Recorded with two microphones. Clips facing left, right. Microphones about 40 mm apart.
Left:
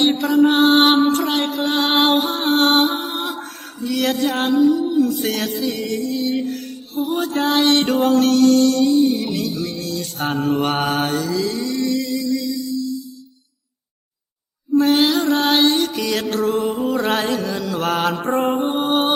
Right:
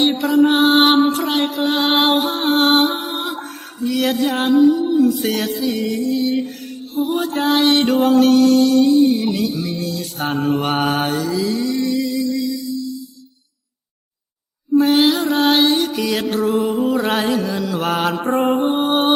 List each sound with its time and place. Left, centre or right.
0.0 s mantra: centre
3.2 s music: centre
14.7 s music: centre